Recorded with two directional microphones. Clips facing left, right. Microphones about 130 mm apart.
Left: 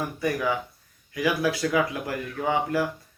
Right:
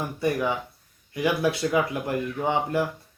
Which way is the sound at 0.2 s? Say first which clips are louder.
Right 2 dB; 25° right (ahead or behind).